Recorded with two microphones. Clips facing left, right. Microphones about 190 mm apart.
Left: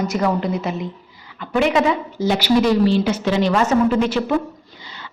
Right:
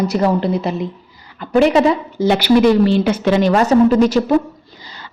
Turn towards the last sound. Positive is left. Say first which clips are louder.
# right 1 dB
turn(degrees=-40)  # may be behind; listen again after turning